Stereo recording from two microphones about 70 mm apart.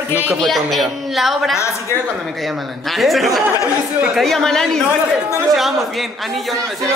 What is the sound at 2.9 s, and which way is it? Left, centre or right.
A man's voice, centre.